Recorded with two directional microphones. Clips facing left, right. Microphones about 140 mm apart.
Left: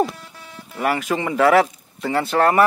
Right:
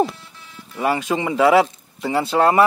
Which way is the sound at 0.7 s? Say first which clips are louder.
Right 1 dB; 25° right (ahead or behind).